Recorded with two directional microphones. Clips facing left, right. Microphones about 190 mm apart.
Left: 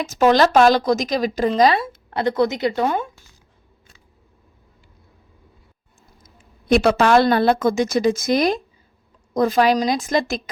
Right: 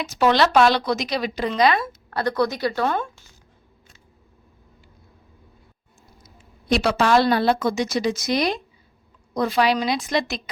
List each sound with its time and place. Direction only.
0.0 s a woman's voice: 45° left (ahead or behind)
1.8 s a woman's voice: 20° left (ahead or behind)
6.2 s a woman's voice: 50° left (ahead or behind)